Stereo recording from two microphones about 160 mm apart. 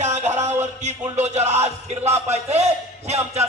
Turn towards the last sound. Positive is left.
turn(degrees=-40)  # may be behind; listen again after turning